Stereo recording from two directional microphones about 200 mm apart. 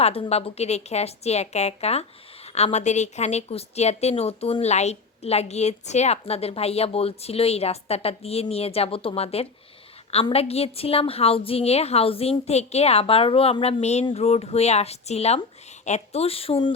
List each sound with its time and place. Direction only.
0.0 s a woman's voice: 30° left (ahead or behind)